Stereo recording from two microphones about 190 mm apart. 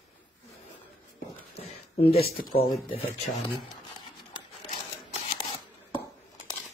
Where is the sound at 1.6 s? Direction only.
30° left (ahead or behind).